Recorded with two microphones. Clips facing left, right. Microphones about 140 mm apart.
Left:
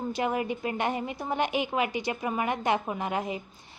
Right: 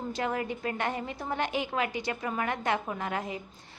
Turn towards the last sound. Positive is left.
turn(degrees=20)  # may be behind; listen again after turning